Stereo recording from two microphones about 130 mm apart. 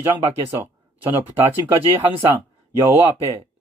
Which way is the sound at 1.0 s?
15° right (ahead or behind).